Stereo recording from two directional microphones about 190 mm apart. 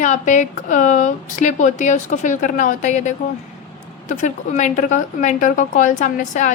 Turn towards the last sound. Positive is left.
turn(degrees=40)  # may be behind; listen again after turning